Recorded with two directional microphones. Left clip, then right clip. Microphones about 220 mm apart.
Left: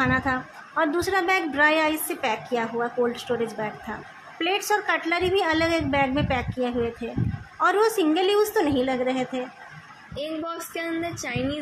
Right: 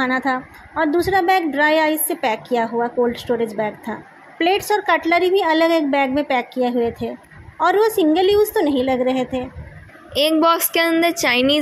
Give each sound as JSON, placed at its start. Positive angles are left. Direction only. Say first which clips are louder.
{"t": 0.0, "sound": "a woman's voice", "louder": "right 4 dB", "side_deg": -20}
{"t": 10.1, "sound": "a woman's voice", "louder": "right 15 dB", "side_deg": -50}